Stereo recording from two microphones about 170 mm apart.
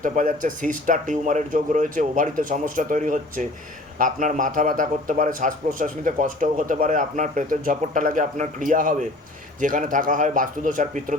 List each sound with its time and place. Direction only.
0.0 s a man's voice: 50° right (ahead or behind)